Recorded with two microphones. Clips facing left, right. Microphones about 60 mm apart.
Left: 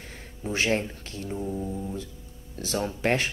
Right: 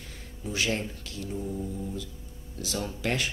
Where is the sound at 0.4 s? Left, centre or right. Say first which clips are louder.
Left 4 dB; left.